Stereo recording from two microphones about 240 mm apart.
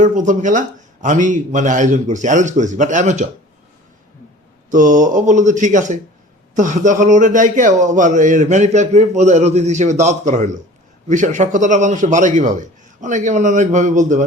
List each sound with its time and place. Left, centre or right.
0.0 s speech: right
4.7 s speech: right